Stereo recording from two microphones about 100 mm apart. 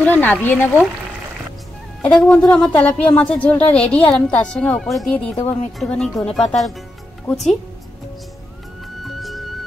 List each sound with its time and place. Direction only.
0.0 s speech: 15° left (ahead or behind)
2.0 s a woman's voice: 10° left (ahead or behind)
5.1 s a woman's voice: 15° left (ahead or behind)
5.9 s speech: 5° left (ahead or behind)
9.0 s music: centre (ahead or behind)